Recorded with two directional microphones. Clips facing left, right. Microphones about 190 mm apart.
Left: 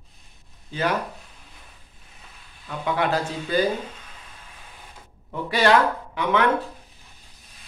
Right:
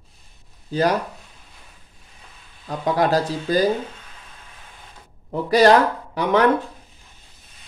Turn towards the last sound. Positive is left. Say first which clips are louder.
# right 4 dB
turn(degrees=-40)  # may be behind; listen again after turning